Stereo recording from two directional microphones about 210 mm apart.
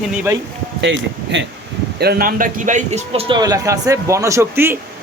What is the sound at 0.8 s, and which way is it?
A man's voice, 60° right (ahead or behind).